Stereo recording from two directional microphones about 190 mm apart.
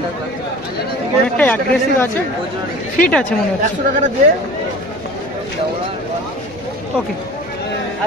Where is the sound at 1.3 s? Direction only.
10° left (ahead or behind).